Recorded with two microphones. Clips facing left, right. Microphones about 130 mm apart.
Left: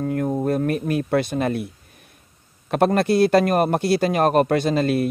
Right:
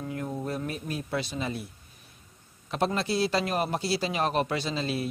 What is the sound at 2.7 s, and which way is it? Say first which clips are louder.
Speech: left 10 dB; 60° left (ahead or behind).